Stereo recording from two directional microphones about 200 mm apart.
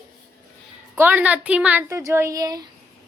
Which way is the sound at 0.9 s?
10° right (ahead or behind).